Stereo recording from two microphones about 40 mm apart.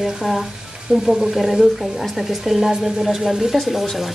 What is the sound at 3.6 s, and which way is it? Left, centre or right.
Speech, centre.